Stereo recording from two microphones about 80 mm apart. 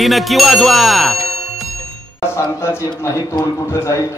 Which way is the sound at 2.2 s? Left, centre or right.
Left.